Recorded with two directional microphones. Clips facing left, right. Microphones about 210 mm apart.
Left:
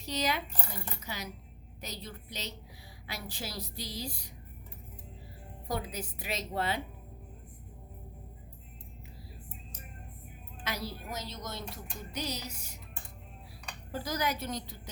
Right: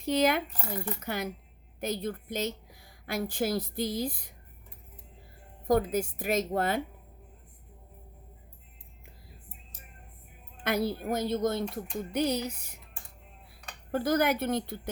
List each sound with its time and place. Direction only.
0.0 s a woman's voice: 55° right (ahead or behind)
5.6 s a woman's voice: 50° right (ahead or behind)
10.6 s a woman's voice: 55° right (ahead or behind)
13.9 s a woman's voice: 55° right (ahead or behind)